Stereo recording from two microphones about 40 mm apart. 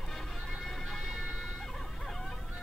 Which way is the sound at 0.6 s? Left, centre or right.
Centre.